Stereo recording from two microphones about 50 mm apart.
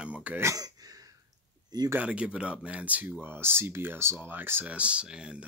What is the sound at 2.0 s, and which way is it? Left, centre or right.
Speech, right.